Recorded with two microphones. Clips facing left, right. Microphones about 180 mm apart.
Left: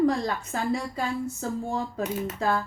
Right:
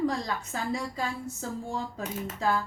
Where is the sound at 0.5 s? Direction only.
60° left (ahead or behind).